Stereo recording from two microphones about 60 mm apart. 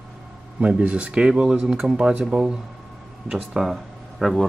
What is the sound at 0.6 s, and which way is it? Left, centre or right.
Speech, centre.